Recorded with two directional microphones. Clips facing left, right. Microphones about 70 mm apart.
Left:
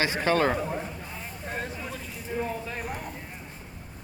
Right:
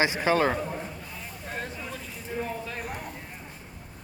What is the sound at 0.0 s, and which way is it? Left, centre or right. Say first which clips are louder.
Speech: right 1 dB; centre.